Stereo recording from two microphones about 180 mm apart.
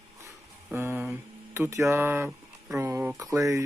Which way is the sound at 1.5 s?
15° right (ahead or behind).